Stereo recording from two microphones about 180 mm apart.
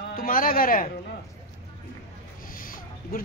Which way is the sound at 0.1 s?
50° left (ahead or behind).